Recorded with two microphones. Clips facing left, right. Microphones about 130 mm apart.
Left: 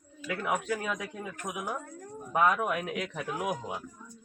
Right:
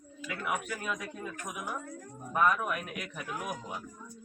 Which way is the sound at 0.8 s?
90° left.